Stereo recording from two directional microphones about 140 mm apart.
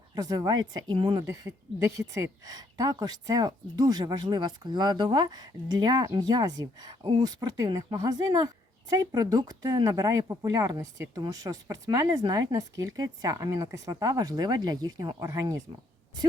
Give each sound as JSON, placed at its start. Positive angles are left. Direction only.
{"t": 0.2, "sound": "speech", "side_deg": -30}